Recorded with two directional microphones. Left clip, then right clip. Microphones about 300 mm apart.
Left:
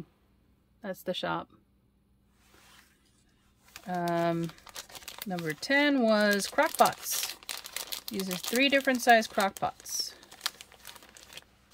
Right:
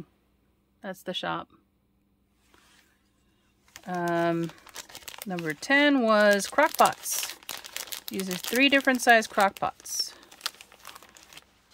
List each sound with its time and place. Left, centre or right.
0.7 s speech: centre
3.8 s speech: centre